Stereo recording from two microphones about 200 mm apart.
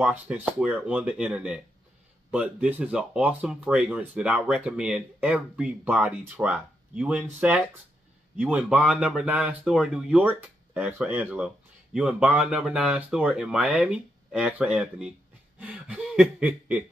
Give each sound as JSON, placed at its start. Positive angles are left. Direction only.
{"t": 0.0, "sound": "speech", "side_deg": -5}
{"t": 15.6, "sound": "snicker", "side_deg": -5}